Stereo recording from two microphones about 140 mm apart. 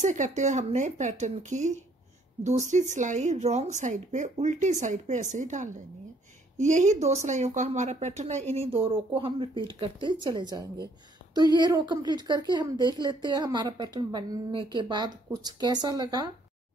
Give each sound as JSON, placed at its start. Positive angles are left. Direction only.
{"t": 0.0, "sound": "a woman's voice", "side_deg": -60}